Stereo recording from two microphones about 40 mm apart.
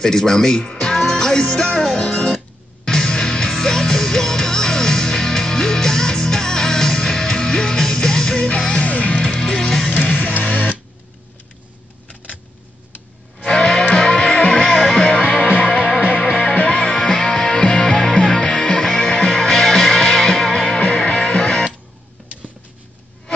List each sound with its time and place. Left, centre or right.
0.0 s speech: centre
1.1 s music: centre
8.7 s music: left; by 9.9 s centre
9.9 s music: left
13.5 s music: centre
14.6 s music: centre
15.0 s music: left
15.7 s music: right
16.4 s music: left
16.7 s music: centre
20.8 s music: left
21.5 s music: centre